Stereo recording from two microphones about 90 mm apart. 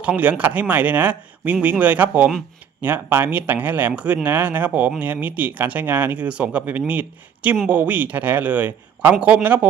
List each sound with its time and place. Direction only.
0.0 s speech: 15° right (ahead or behind)